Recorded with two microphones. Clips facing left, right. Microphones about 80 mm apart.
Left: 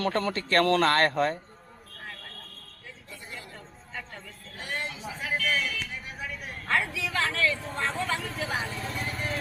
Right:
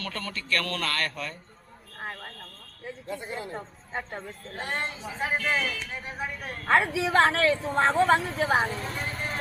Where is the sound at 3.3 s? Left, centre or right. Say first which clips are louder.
Right 8 dB; right.